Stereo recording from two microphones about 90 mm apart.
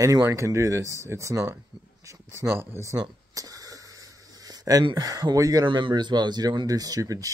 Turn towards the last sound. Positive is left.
turn(degrees=-40)  # may be behind; listen again after turning